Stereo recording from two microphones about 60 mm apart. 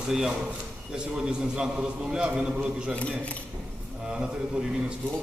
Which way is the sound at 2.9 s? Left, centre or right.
Left.